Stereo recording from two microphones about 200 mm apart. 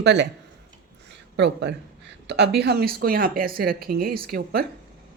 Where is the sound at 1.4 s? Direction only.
60° right (ahead or behind).